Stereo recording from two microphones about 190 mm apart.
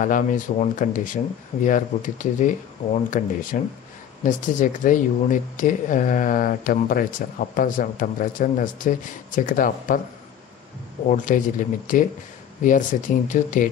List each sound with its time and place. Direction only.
0.0 s speech: 45° left (ahead or behind)
11.1 s speech: 45° left (ahead or behind)